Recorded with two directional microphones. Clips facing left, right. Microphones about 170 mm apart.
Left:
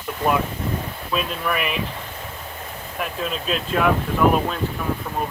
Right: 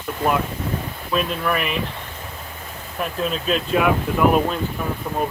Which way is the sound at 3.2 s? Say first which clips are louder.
Right 4 dB; centre (ahead or behind).